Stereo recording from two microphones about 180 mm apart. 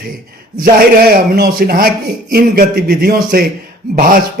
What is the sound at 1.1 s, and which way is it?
A man's voice, 55° right (ahead or behind).